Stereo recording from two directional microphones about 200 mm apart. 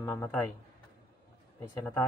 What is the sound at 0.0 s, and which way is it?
Speech, 5° left (ahead or behind).